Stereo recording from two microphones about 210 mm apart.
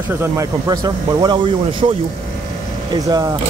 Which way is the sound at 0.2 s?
15° right (ahead or behind).